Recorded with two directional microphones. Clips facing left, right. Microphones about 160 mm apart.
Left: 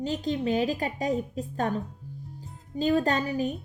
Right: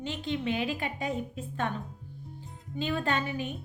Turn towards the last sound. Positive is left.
turn(degrees=40)  # may be behind; listen again after turning